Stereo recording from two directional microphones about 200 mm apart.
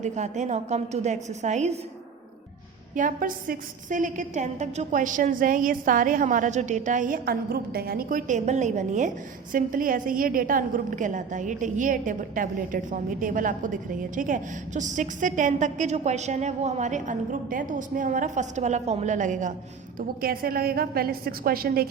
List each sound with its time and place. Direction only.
0.0 s a woman's voice: 35° right (ahead or behind)
2.9 s a woman's voice: 40° right (ahead or behind)